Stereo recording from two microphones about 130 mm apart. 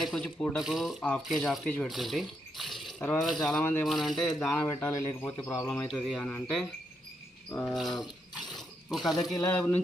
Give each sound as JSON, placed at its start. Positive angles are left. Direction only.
{"t": 0.0, "sound": "speech", "side_deg": 5}
{"t": 3.6, "sound": "speech", "side_deg": 15}
{"t": 3.8, "sound": "speech", "side_deg": 0}
{"t": 4.6, "sound": "speech", "side_deg": 15}
{"t": 7.5, "sound": "pulleys", "side_deg": 5}
{"t": 8.9, "sound": "speech", "side_deg": 0}
{"t": 9.5, "sound": "speech", "side_deg": 10}